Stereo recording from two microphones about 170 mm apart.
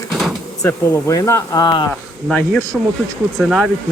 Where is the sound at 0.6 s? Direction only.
20° left (ahead or behind).